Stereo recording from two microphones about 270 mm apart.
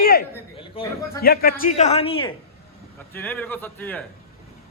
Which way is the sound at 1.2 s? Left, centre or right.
Left.